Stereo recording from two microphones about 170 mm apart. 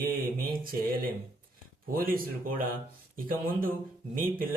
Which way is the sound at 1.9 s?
55° right (ahead or behind).